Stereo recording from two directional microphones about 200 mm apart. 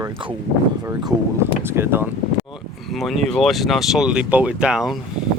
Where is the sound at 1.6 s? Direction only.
10° right (ahead or behind).